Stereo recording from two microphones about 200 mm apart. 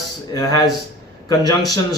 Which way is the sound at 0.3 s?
20° left (ahead or behind).